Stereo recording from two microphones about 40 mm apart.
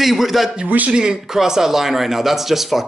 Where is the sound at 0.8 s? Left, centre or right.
Right.